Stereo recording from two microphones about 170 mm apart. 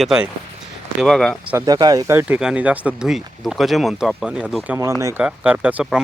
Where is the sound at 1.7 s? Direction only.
20° right (ahead or behind).